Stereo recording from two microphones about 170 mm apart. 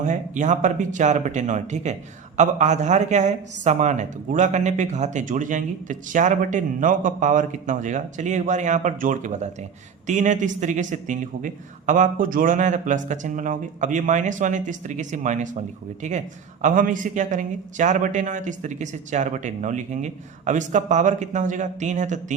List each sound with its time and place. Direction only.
0.0 s a woman's voice: 45° right (ahead or behind)